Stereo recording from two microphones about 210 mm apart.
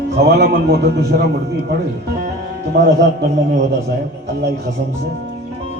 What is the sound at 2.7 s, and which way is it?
Speech, 55° right (ahead or behind).